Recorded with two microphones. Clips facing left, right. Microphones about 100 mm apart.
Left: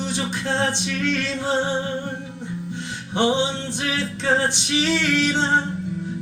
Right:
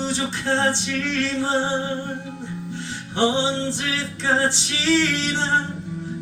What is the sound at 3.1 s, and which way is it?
Music, 15° left (ahead or behind).